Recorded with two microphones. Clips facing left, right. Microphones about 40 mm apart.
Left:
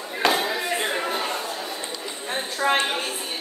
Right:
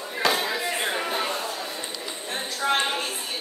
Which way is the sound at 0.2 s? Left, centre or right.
Centre.